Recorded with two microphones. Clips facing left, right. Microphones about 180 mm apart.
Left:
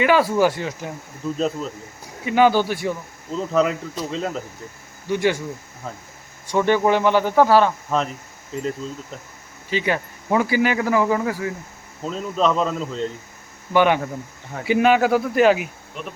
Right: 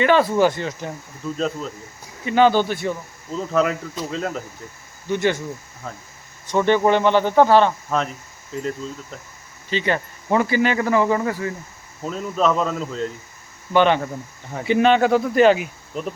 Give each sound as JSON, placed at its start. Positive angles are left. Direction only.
{"t": 0.0, "sound": "speech", "side_deg": 5}
{"t": 5.0, "sound": "speech", "side_deg": 10}
{"t": 9.6, "sound": "speech", "side_deg": 10}
{"t": 13.7, "sound": "speech", "side_deg": 10}
{"t": 15.9, "sound": "insect", "side_deg": -40}